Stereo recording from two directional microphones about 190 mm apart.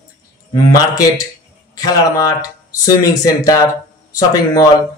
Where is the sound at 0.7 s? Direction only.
20° left (ahead or behind).